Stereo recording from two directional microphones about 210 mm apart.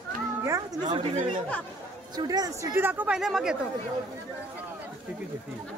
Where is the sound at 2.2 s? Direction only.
15° right (ahead or behind).